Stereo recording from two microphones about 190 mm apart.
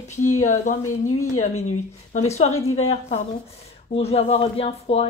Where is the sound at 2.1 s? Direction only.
35° left (ahead or behind).